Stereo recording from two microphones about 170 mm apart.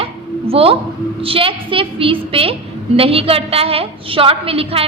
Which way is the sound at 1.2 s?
35° right (ahead or behind).